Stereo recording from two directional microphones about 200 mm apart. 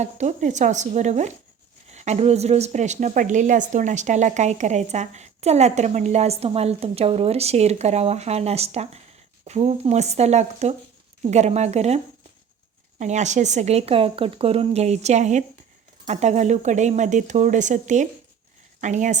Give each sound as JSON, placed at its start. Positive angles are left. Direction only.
{"t": 0.0, "sound": "a woman's voice", "side_deg": -35}
{"t": 13.0, "sound": "a woman's voice", "side_deg": -35}